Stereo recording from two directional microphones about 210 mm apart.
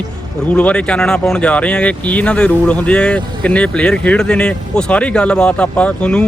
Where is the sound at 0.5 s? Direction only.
5° left (ahead or behind).